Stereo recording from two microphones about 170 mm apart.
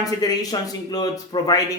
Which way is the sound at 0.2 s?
25° left (ahead or behind).